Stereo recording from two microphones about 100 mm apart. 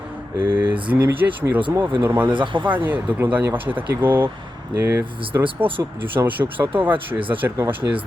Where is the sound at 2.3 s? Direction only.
55° right (ahead or behind).